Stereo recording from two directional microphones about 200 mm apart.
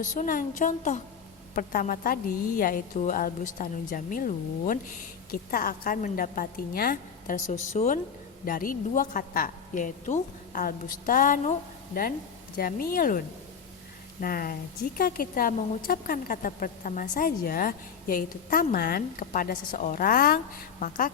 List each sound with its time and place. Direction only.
0.0 s a woman's voice: 40° left (ahead or behind)
12.5 s a woman's voice: 45° left (ahead or behind)